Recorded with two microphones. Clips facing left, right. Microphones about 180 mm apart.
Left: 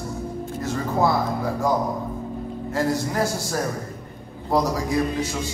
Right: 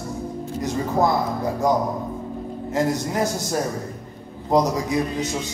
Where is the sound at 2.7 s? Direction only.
20° right (ahead or behind).